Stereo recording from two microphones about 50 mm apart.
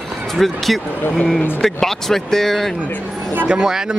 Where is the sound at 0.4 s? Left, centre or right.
Centre.